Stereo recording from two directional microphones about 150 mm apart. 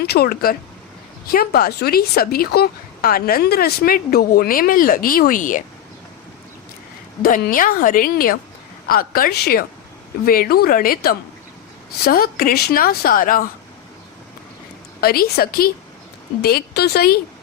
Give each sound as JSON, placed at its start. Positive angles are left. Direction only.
{"t": 0.0, "sound": "a woman's voice", "side_deg": 90}
{"t": 7.2, "sound": "a woman's voice", "side_deg": 80}
{"t": 15.0, "sound": "a woman's voice", "side_deg": 90}